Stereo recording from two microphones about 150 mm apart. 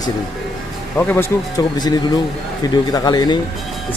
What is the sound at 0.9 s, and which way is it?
Speech, 15° left (ahead or behind).